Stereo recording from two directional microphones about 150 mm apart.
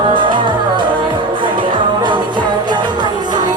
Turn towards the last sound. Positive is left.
turn(degrees=-30)  # may be behind; listen again after turning